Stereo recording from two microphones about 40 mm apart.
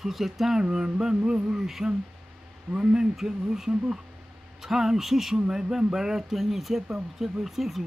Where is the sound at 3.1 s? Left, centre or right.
Centre.